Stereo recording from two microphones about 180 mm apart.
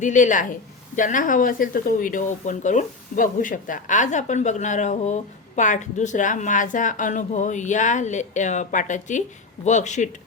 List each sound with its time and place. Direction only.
0.0 s speech: 45° left (ahead or behind)